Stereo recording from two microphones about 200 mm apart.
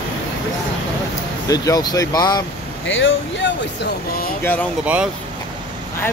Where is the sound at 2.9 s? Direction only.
75° left (ahead or behind).